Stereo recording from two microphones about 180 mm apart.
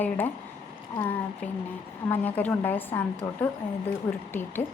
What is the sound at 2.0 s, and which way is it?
Speech, 10° left (ahead or behind).